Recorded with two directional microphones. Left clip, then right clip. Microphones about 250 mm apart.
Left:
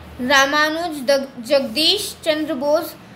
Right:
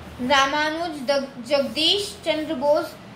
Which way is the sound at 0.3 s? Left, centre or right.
Left.